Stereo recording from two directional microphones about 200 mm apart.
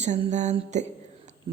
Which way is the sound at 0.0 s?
35° right (ahead or behind).